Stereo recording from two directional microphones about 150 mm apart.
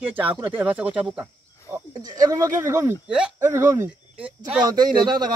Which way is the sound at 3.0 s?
5° right (ahead or behind).